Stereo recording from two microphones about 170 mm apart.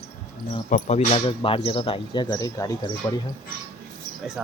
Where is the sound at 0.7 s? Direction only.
40° left (ahead or behind); by 3.2 s 20° left (ahead or behind).